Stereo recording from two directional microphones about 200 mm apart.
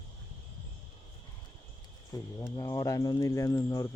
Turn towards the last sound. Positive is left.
turn(degrees=20)  # may be behind; listen again after turning